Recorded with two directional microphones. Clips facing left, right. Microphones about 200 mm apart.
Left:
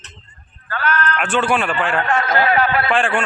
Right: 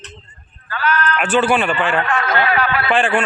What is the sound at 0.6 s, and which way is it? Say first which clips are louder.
Sheep: right 1 dB; 55° left (ahead or behind).